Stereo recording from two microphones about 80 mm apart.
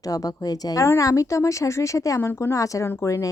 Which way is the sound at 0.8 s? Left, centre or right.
Left.